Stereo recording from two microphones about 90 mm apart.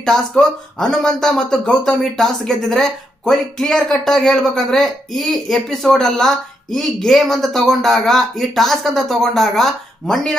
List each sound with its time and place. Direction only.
0.0 s speech: 5° left (ahead or behind)